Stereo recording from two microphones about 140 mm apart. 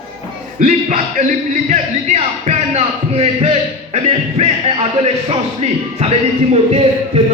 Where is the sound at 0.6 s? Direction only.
60° right (ahead or behind).